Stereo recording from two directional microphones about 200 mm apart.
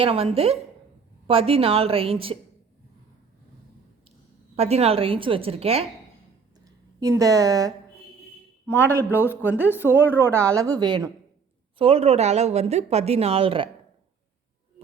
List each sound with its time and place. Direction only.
0.0 s a woman's voice: 30° right (ahead or behind)
4.5 s a woman's voice: 30° right (ahead or behind)
7.0 s a woman's voice: 15° right (ahead or behind)
8.6 s a man's voice: 10° left (ahead or behind)
10.1 s a woman's voice: 10° right (ahead or behind); by 13.7 s 30° right (ahead or behind)